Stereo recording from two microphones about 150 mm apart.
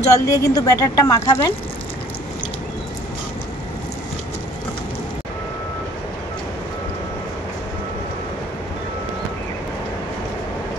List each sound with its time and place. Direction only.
0.0 s speech: 20° left (ahead or behind)